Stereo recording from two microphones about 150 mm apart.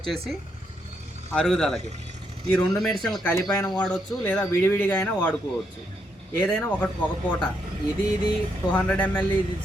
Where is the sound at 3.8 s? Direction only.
5° left (ahead or behind).